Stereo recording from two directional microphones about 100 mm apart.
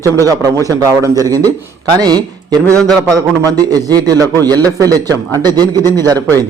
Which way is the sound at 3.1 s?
40° right (ahead or behind).